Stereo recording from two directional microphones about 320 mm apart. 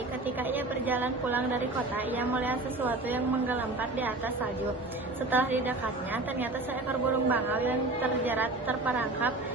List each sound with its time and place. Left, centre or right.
0.5 s a woman's voice: centre
5.3 s a woman's voice: centre
7.3 s a woman's voice: centre